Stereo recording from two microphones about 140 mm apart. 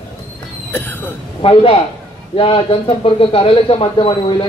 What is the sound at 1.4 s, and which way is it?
Speech, 40° left (ahead or behind).